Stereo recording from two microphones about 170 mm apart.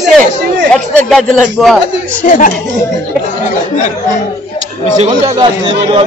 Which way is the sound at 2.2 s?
50° left (ahead or behind).